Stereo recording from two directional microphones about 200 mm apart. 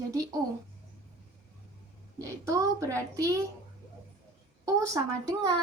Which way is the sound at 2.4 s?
15° right (ahead or behind).